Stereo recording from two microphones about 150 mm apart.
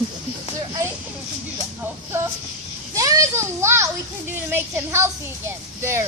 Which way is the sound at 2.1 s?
15° right (ahead or behind).